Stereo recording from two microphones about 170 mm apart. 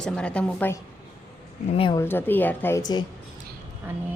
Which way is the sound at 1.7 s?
30° left (ahead or behind).